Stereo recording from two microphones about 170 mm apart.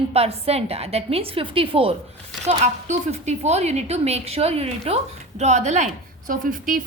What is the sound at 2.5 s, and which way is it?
A woman's voice, 45° right (ahead or behind).